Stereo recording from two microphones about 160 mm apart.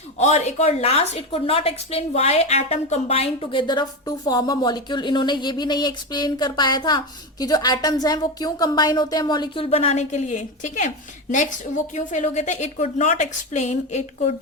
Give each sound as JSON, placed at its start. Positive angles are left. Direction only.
{"t": 0.2, "sound": "a woman's voice", "side_deg": 45}